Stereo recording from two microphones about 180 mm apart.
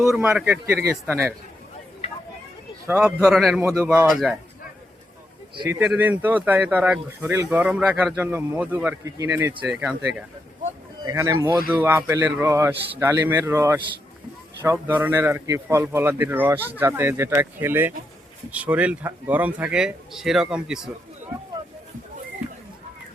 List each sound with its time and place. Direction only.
0.1 s speech: 5° right (ahead or behind)
2.8 s a man's voice: 10° right (ahead or behind)
5.6 s speech: 10° right (ahead or behind)
11.0 s speech: 15° right (ahead or behind)